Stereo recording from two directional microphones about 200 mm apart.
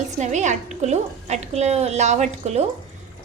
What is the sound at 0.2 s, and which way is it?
A woman's voice, 35° right (ahead or behind).